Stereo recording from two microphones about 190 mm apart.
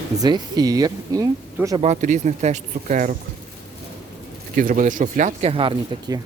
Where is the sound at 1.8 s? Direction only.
40° right (ahead or behind).